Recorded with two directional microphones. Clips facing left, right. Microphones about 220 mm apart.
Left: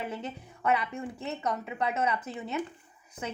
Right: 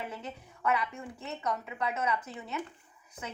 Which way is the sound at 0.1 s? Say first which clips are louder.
Left 4 dB; 25° left (ahead or behind).